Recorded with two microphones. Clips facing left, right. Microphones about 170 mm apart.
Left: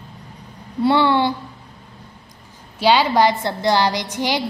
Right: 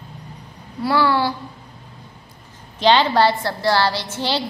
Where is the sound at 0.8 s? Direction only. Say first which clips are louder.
Left 2 dB; 25° left (ahead or behind).